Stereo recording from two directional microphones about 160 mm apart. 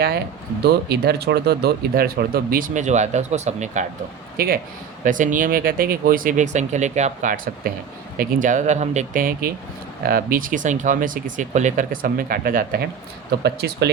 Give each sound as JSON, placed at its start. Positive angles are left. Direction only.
{"t": 0.6, "sound": "speech", "side_deg": -90}
{"t": 4.4, "sound": "speech", "side_deg": -70}
{"t": 5.0, "sound": "speech", "side_deg": -55}
{"t": 13.4, "sound": "speech", "side_deg": -90}